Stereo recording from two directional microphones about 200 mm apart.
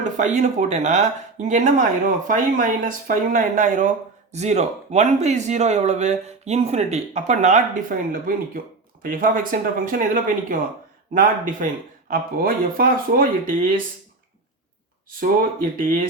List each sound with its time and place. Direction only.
0.0 s speech: 35° right (ahead or behind)